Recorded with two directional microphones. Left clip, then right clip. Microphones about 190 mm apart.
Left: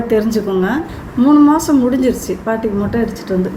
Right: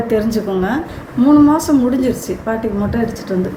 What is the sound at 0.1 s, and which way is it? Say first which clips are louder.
A woman's voice: left 4 dB; centre (ahead or behind).